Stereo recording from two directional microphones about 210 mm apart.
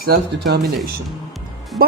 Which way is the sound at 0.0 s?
50° right (ahead or behind).